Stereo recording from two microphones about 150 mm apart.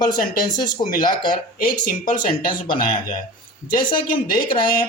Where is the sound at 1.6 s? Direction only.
75° left (ahead or behind).